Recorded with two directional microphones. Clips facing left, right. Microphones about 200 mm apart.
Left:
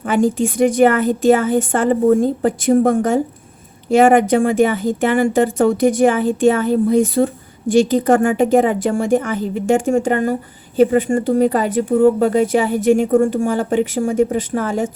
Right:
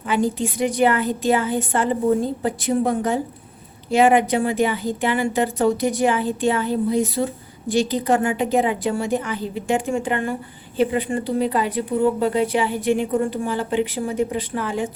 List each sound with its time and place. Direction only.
0.0 s speech: 50° left (ahead or behind)